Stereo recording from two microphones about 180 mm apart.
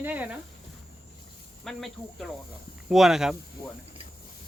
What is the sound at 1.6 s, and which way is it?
A man's voice, centre (ahead or behind).